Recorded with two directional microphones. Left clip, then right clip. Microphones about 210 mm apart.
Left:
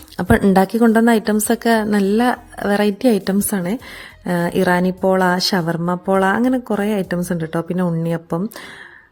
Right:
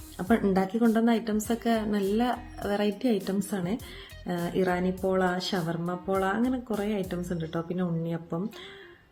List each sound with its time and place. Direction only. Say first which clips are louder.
0.2 s a woman's voice: left 11 dB; 50° left (ahead or behind)